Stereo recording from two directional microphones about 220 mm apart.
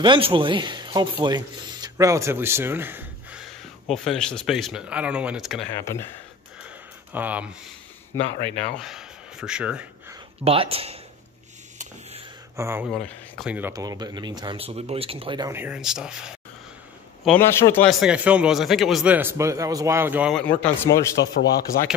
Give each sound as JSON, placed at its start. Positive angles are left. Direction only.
{"t": 0.0, "sound": "a man's voice", "side_deg": -20}
{"t": 5.8, "sound": "a man's voice", "side_deg": 15}
{"t": 6.6, "sound": "a sound", "side_deg": -5}
{"t": 8.3, "sound": "a man's voice", "side_deg": -25}
{"t": 8.5, "sound": "speech", "side_deg": 5}
{"t": 10.4, "sound": "a man's voice", "side_deg": -25}
{"t": 12.5, "sound": "speech", "side_deg": -10}
{"t": 12.9, "sound": "speech", "side_deg": 0}
{"t": 17.2, "sound": "a man's voice", "side_deg": 5}
{"t": 17.8, "sound": "speech", "side_deg": -5}
{"t": 20.4, "sound": "a man's voice", "side_deg": 10}
{"t": 21.2, "sound": "speech", "side_deg": 50}